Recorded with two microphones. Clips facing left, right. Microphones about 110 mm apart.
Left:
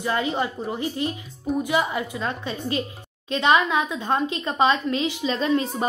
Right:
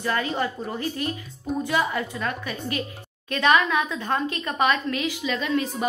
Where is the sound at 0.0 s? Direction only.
20° left (ahead or behind).